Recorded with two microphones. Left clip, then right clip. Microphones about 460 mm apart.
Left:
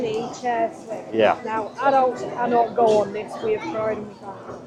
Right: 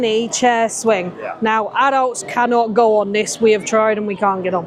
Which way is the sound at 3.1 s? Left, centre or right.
Right.